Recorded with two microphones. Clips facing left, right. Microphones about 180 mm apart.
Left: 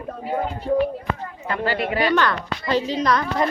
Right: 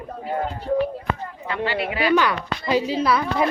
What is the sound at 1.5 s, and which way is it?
Speech, 45° left (ahead or behind).